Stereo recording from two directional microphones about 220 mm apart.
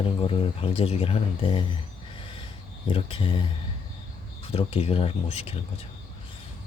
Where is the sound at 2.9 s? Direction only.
25° left (ahead or behind).